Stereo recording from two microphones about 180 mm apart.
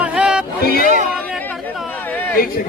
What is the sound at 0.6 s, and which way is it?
Speech, 55° left (ahead or behind).